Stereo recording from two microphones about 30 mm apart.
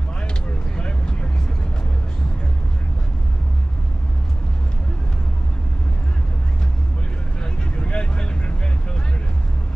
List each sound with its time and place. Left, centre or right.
0.7 s vehicle: left
7.7 s vehicle: left